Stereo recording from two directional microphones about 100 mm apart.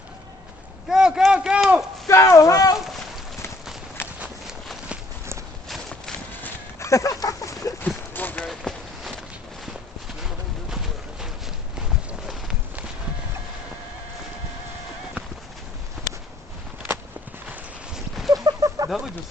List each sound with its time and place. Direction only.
0.9 s a sound: 5° right (ahead or behind)
2.0 s speech: 30° left (ahead or behind)
4.0 s walk: 5° right (ahead or behind)
5.6 s clip-clop: centre (ahead or behind)
6.4 s a sound: 30° left (ahead or behind)
7.9 s clip-clop: 20° left (ahead or behind)
8.4 s a sound: centre (ahead or behind)
10.2 s pigeon: 5° right (ahead or behind)
12.2 s clip-clop: 5° right (ahead or behind)
17.9 s a sound: 5° right (ahead or behind)
18.4 s fowl: 35° right (ahead or behind)
18.9 s bird: 5° right (ahead or behind)